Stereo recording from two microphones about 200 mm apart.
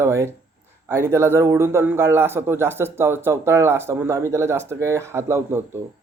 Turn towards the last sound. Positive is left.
turn(degrees=-10)  # may be behind; listen again after turning